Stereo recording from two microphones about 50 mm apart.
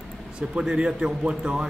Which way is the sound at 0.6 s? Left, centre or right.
Centre.